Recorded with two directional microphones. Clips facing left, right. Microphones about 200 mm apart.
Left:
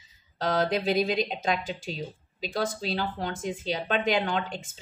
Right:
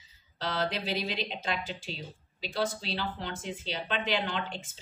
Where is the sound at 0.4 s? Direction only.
45° left (ahead or behind).